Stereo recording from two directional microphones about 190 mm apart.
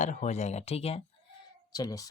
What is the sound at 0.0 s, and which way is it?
Speech, 40° left (ahead or behind).